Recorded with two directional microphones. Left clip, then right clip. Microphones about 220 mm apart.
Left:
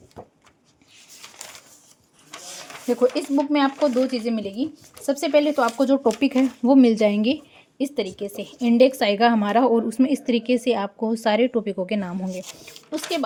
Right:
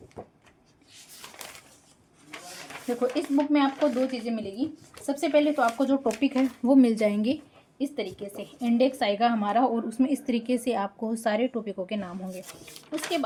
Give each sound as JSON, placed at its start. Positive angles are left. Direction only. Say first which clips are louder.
{"t": 0.2, "sound": "speech", "louder": "left 1 dB", "side_deg": 15}
{"t": 3.0, "sound": "a woman's voice", "louder": "left 5 dB", "side_deg": 50}
{"t": 6.6, "sound": "a woman's voice", "louder": "left 5 dB", "side_deg": 30}
{"t": 7.8, "sound": "a woman's voice", "louder": "left 6 dB", "side_deg": 50}
{"t": 12.3, "sound": "speech", "louder": "left 7 dB", "side_deg": 15}
{"t": 12.9, "sound": "a woman's voice", "louder": "left 3 dB", "side_deg": 50}